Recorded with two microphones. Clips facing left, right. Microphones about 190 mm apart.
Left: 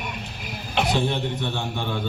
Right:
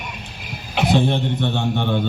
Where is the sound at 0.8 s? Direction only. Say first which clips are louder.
Right 8 dB; 60° right (ahead or behind).